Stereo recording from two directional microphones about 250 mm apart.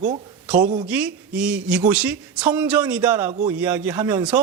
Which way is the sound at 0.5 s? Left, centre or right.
Right.